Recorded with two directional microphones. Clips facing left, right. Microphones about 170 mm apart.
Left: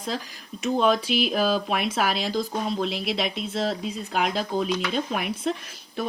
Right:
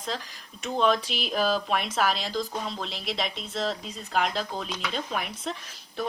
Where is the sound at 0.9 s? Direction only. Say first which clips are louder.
Left 3 dB; 5° left (ahead or behind).